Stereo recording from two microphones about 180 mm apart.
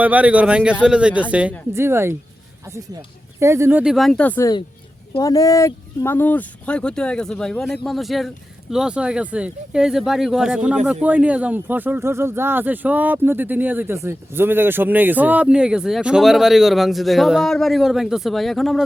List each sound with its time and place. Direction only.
0.0 s speech: 10° right (ahead or behind)
3.4 s speech: 15° right (ahead or behind); by 4.4 s 10° left (ahead or behind)
5.1 s speech: 20° left (ahead or behind); by 18.9 s centre (ahead or behind)